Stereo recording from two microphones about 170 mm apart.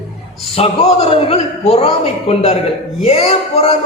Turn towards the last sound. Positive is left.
turn(degrees=35)  # may be behind; listen again after turning